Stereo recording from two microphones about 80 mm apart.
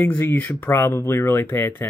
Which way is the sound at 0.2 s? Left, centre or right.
Left.